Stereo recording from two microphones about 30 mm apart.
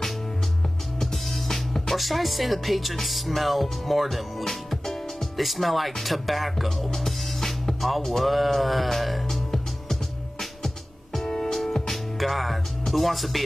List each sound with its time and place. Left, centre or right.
0.9 s speech: centre
6.9 s music: centre
8.2 s speech: centre
11.2 s music: left
11.5 s music: centre